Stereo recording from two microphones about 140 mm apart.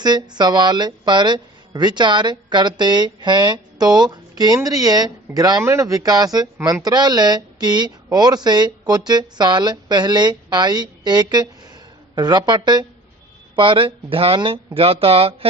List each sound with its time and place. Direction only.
0.0 s speech: 30° right (ahead or behind)